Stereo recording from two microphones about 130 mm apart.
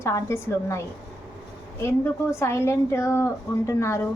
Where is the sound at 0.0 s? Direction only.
20° left (ahead or behind).